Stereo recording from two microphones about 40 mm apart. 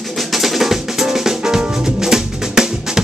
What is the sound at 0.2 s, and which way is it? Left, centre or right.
Drum kit, centre.